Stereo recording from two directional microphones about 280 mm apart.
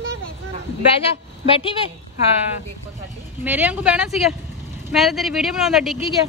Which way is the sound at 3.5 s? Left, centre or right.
Centre.